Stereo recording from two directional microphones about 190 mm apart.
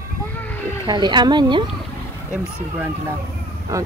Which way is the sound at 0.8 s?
25° right (ahead or behind).